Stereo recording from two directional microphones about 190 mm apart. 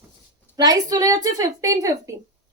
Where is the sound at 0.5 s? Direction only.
20° right (ahead or behind).